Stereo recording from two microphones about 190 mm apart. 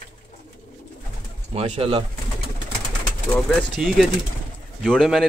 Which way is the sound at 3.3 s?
5° left (ahead or behind).